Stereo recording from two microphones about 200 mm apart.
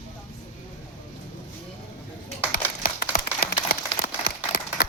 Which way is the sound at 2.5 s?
45° left (ahead or behind).